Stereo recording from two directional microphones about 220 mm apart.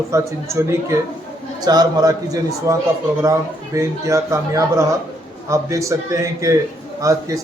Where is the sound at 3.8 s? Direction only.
15° right (ahead or behind).